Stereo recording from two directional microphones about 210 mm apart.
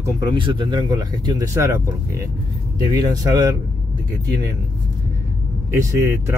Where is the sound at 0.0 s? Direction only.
20° right (ahead or behind).